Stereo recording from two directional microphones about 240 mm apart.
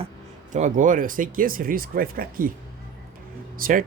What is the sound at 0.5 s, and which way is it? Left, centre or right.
Speech, right.